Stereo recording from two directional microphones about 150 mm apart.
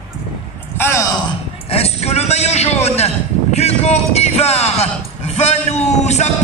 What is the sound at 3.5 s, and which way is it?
Speech, 45° left (ahead or behind).